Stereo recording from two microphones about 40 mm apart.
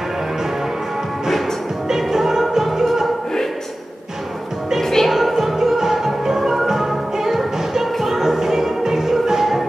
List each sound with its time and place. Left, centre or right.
1.9 s music: centre
4.8 s music: centre
5.3 s music: centre